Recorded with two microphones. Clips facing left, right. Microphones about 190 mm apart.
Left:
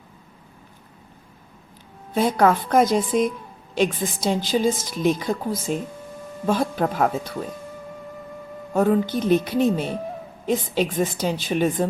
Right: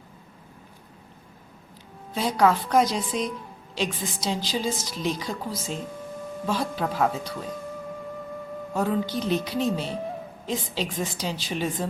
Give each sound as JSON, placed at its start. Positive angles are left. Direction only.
{"t": 2.1, "sound": "a woman's voice", "side_deg": 55}
{"t": 8.7, "sound": "a woman's voice", "side_deg": 55}